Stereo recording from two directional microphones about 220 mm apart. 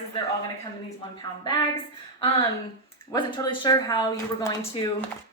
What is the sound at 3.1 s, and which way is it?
Speech, 20° left (ahead or behind).